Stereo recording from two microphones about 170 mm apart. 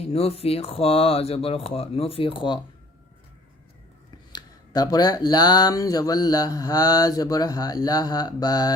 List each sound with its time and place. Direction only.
0.0 s speech: 35° left (ahead or behind)
4.3 s speech: 25° left (ahead or behind)